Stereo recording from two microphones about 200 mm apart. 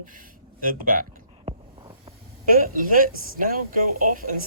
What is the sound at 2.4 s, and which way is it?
Speech, 45° right (ahead or behind).